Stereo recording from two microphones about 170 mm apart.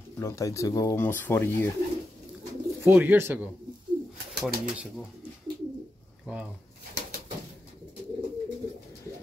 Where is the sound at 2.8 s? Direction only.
10° right (ahead or behind).